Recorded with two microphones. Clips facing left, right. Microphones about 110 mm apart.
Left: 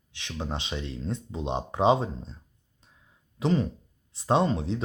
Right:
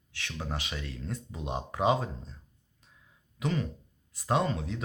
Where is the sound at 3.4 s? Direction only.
30° left (ahead or behind).